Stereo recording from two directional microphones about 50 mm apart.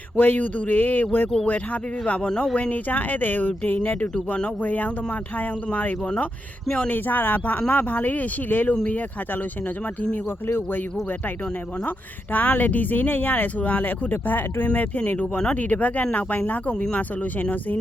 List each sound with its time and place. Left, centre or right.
0.2 s speech: left
2.2 s speech: centre
2.6 s speech: left
6.7 s speech: left
6.9 s speech: left
11.9 s speech: left